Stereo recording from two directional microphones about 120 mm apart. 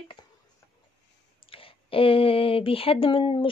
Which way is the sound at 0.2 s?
35° left (ahead or behind).